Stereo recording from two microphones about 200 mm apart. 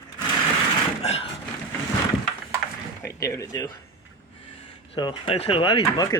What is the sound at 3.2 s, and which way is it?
Speech, 15° left (ahead or behind).